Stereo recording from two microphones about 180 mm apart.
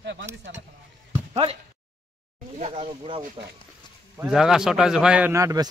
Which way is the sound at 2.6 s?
35° right (ahead or behind).